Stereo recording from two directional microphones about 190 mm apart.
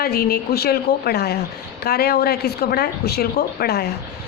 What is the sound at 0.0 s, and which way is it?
Speech, 55° left (ahead or behind).